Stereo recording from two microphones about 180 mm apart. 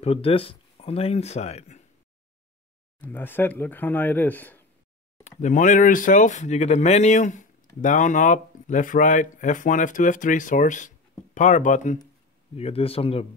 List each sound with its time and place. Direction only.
0.0 s speech: 35° left (ahead or behind)
3.0 s speech: 10° left (ahead or behind)
5.2 s speech: 45° left (ahead or behind)